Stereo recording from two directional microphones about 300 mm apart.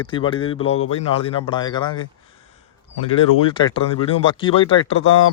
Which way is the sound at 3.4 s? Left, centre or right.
Centre.